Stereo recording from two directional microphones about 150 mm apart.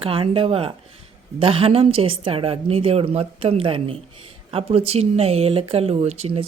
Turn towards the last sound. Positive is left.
turn(degrees=-45)  # may be behind; listen again after turning